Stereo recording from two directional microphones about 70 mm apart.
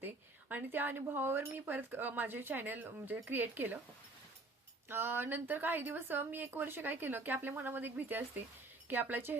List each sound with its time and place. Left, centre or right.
0.0 s speech: right
4.9 s speech: right